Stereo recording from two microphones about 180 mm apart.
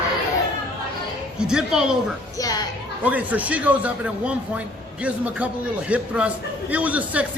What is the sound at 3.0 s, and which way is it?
A man's voice, 10° right (ahead or behind).